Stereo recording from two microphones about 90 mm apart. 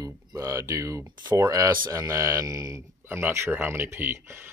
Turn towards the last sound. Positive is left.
turn(degrees=-25)  # may be behind; listen again after turning